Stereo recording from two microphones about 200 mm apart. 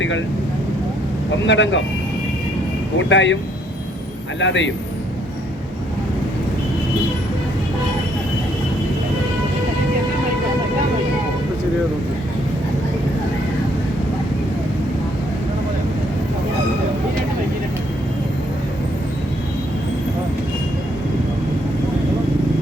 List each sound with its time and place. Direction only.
1.5 s speech: 65° left (ahead or behind)
3.0 s speech: 65° left (ahead or behind)
4.4 s speech: 65° left (ahead or behind)